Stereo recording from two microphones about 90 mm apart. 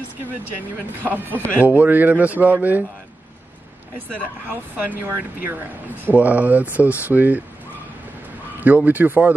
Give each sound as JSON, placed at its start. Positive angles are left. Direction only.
{"t": 1.0, "sound": "speech", "side_deg": -20}
{"t": 4.5, "sound": "speech", "side_deg": -20}
{"t": 8.5, "sound": "speech", "side_deg": -20}